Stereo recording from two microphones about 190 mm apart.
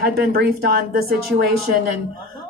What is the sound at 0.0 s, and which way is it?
Speech, 50° right (ahead or behind).